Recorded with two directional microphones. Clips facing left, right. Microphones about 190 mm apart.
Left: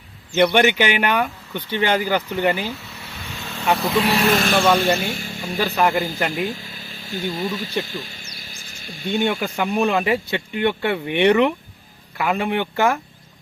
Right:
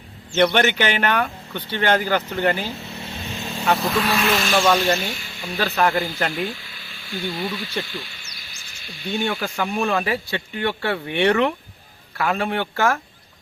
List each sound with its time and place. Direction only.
0.3 s speech: 10° left (ahead or behind)
2.8 s vehicle: 25° right (ahead or behind)
3.7 s speech: centre (ahead or behind)
3.9 s speech: 20° left (ahead or behind)
4.2 s speech: 45° left (ahead or behind)
5.5 s speech: 10° left (ahead or behind)
6.3 s speech: 45° left (ahead or behind)
9.0 s speech: 20° left (ahead or behind)